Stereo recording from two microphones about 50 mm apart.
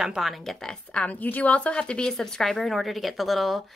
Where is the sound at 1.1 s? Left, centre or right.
Left.